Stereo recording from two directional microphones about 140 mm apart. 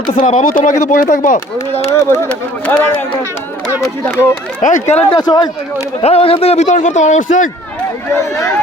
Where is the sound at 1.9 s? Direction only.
20° left (ahead or behind).